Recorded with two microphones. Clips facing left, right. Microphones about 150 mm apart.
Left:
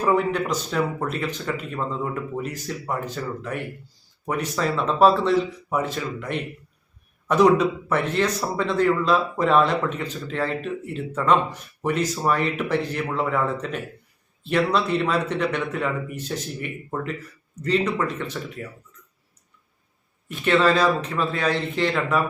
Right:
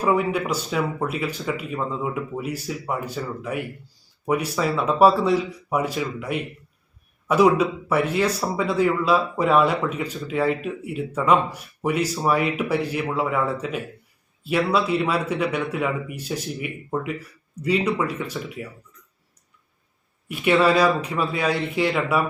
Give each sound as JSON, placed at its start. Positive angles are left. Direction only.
{"t": 0.0, "sound": "a man's voice", "side_deg": -10}
{"t": 20.2, "sound": "a man's voice", "side_deg": -10}